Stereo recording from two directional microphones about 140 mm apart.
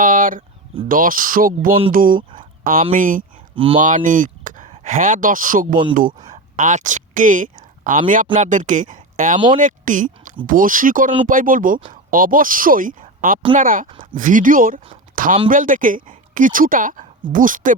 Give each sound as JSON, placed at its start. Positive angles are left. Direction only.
{"t": 0.0, "sound": "speech", "side_deg": -75}
{"t": 3.5, "sound": "speech", "side_deg": -40}
{"t": 3.8, "sound": "speech", "side_deg": -70}
{"t": 6.6, "sound": "speech", "side_deg": -65}
{"t": 10.4, "sound": "speech", "side_deg": -80}
{"t": 15.1, "sound": "a sound", "side_deg": -75}
{"t": 15.4, "sound": "a woman's voice", "side_deg": -70}